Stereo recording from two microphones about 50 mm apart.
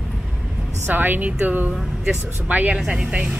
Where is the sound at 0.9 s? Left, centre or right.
Right.